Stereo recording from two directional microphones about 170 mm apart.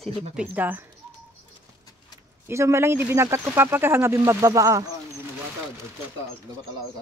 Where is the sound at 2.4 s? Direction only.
15° right (ahead or behind).